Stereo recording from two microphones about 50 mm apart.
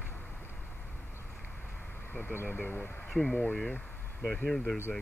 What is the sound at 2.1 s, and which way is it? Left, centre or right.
Speech, left.